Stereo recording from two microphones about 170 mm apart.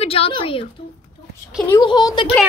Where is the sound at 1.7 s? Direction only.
25° left (ahead or behind).